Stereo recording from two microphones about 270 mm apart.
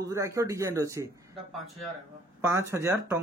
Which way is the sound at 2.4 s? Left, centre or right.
Centre.